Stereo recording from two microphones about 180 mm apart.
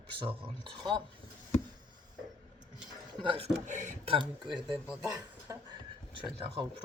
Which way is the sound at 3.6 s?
45° right (ahead or behind).